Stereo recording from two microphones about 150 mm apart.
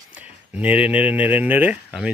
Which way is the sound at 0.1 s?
10° right (ahead or behind).